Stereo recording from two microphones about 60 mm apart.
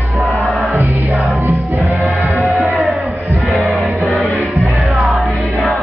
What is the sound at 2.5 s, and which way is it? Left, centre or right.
Music, centre.